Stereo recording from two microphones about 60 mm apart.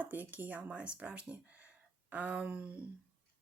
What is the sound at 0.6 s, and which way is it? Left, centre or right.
Speech, centre.